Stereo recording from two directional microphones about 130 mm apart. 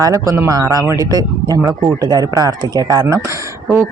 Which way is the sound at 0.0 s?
25° right (ahead or behind).